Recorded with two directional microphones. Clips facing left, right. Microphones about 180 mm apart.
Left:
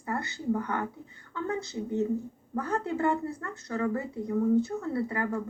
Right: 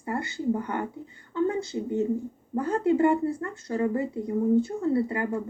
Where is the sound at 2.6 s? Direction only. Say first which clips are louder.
Right 7 dB; 15° right (ahead or behind).